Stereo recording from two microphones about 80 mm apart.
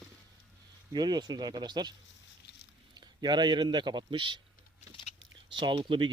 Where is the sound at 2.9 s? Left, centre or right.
Right.